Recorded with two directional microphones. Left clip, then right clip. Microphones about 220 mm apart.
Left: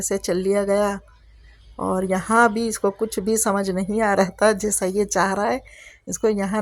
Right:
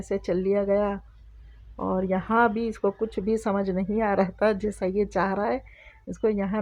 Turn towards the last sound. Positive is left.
turn(degrees=25)  # may be behind; listen again after turning